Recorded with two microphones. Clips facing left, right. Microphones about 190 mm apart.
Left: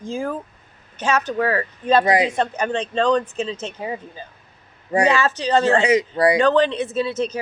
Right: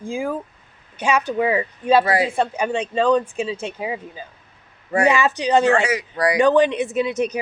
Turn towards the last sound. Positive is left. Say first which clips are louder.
# right 1 dB
turn(degrees=-15)  # may be behind; listen again after turning